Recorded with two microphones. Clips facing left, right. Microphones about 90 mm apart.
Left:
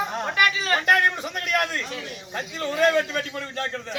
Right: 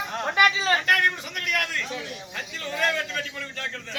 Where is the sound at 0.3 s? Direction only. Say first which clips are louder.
Right 2 dB; 25° right (ahead or behind).